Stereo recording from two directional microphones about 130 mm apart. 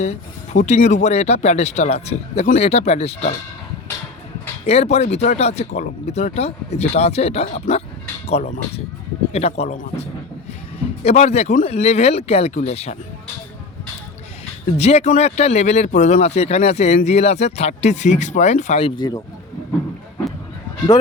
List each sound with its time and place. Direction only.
0.0 s speech: 60° left (ahead or behind)
4.6 s speech: 55° left (ahead or behind)
7.7 s speech: 85° left
8.4 s speech: 55° left (ahead or behind)
11.0 s speech: 55° left (ahead or behind)
14.8 s speech: 55° left (ahead or behind)
18.9 s speech: 30° left (ahead or behind)